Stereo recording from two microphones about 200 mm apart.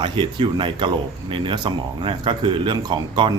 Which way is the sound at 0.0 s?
25° right (ahead or behind).